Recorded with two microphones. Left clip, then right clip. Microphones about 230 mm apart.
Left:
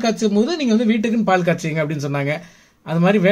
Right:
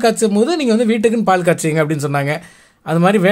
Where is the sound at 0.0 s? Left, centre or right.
Right.